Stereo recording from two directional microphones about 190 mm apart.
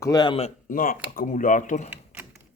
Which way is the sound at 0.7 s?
45° left (ahead or behind).